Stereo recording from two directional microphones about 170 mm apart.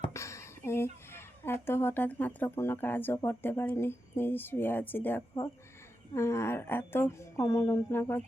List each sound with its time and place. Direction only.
0.1 s a woman's voice: 15° left (ahead or behind)